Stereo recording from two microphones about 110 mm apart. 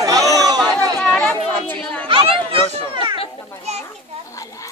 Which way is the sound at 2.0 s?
50° right (ahead or behind).